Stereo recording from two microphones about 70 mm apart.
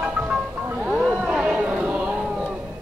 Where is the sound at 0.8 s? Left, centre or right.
Centre.